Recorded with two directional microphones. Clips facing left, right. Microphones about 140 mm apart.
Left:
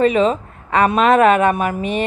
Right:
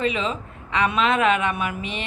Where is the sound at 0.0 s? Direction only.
45° left (ahead or behind).